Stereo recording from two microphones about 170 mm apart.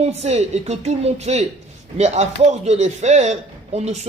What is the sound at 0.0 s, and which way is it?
Speech, 40° right (ahead or behind).